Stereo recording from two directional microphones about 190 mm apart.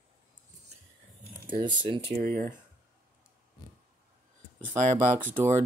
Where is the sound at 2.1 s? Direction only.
45° right (ahead or behind).